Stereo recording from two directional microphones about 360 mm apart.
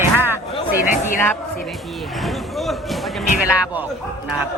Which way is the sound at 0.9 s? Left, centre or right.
Left.